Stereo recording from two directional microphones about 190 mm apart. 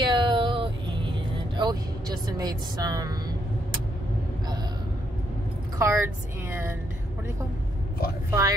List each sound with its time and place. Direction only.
0.0 s music: 25° right (ahead or behind)
1.6 s a woman's voice: 20° right (ahead or behind)
5.8 s a woman's voice: 15° right (ahead or behind)
8.3 s a woman's voice: 15° right (ahead or behind)